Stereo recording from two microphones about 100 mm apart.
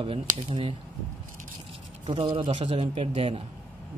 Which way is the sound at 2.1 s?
60° right (ahead or behind).